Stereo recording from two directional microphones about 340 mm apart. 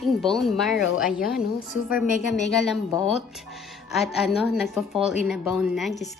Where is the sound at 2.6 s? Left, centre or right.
Centre.